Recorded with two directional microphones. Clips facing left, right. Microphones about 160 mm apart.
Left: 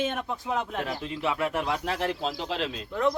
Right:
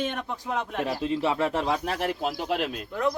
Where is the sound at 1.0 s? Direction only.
30° right (ahead or behind); by 2.7 s 15° right (ahead or behind).